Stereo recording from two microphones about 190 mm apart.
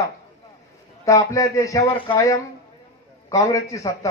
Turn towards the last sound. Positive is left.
turn(degrees=15)  # may be behind; listen again after turning